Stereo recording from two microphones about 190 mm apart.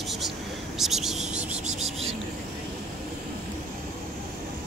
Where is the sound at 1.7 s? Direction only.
35° right (ahead or behind).